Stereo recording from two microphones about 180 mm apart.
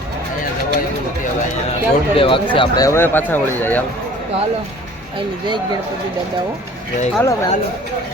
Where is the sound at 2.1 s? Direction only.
30° left (ahead or behind); by 3.8 s 10° left (ahead or behind).